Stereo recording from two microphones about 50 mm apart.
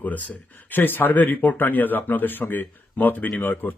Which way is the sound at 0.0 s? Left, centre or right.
Left.